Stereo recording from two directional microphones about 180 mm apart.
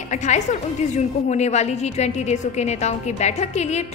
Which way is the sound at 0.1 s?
40° left (ahead or behind).